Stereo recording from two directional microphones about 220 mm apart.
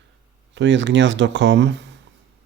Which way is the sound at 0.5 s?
55° right (ahead or behind).